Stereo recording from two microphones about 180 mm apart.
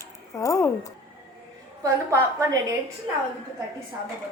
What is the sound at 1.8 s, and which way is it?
Speech, 15° right (ahead or behind).